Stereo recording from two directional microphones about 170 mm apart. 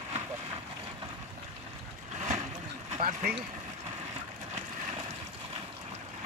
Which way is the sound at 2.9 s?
40° right (ahead or behind).